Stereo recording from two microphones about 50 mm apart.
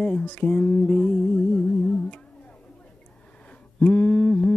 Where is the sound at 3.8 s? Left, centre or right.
Left.